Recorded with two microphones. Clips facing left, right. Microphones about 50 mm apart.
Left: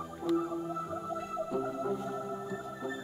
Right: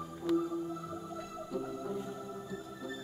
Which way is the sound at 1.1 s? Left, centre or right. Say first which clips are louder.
Left 6 dB; left.